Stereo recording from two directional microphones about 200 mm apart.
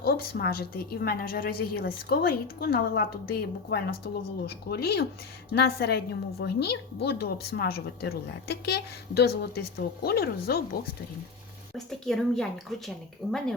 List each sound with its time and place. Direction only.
0.0 s a woman's voice: 50° left (ahead or behind)
11.9 s a woman's voice: centre (ahead or behind)